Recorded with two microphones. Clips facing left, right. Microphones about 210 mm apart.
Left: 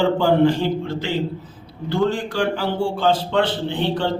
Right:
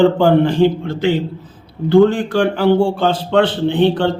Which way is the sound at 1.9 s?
55° right (ahead or behind).